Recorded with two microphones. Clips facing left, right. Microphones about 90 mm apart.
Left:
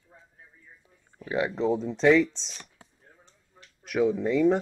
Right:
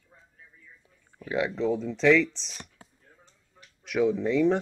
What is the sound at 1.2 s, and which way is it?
Speech, 5° left (ahead or behind).